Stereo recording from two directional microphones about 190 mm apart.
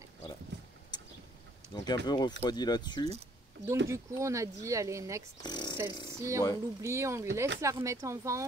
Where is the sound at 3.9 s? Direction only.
15° right (ahead or behind).